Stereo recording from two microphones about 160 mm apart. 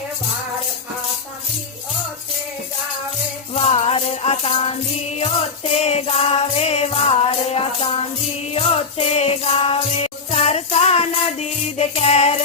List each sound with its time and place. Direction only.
3.5 s music: 40° left (ahead or behind)
5.7 s music: 40° left (ahead or behind)